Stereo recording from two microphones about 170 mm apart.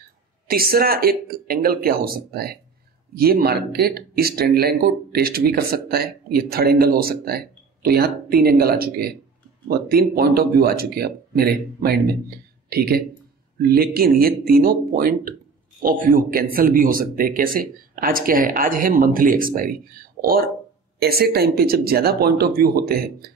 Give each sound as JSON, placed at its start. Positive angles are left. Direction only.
{"t": 0.5, "sound": "speech", "side_deg": -60}